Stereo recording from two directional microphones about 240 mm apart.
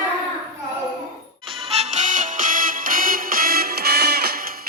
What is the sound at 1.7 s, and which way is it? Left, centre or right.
Music, right.